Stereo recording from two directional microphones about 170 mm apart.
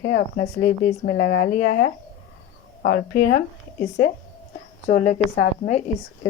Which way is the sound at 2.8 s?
60° left (ahead or behind).